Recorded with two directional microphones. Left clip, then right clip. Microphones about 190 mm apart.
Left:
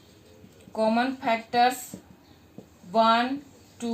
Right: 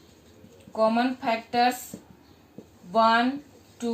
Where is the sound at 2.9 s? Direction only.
40° left (ahead or behind).